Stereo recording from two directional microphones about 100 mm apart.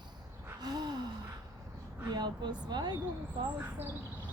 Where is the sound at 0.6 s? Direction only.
45° right (ahead or behind).